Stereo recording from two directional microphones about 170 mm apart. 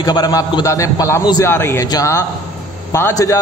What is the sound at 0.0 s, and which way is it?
A man's voice, 25° left (ahead or behind).